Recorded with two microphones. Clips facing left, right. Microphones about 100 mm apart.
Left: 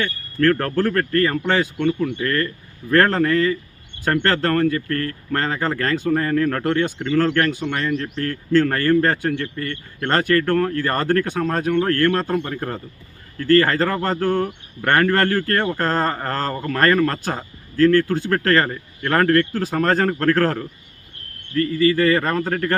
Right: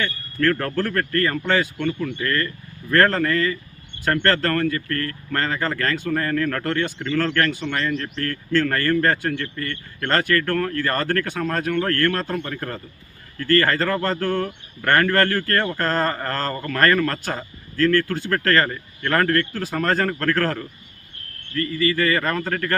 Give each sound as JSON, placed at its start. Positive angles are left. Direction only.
{"t": 0.0, "sound": "a man's voice", "side_deg": 25}